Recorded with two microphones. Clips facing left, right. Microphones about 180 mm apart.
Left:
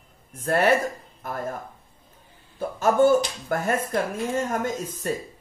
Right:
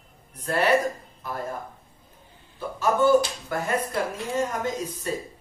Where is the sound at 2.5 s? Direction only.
50° left (ahead or behind).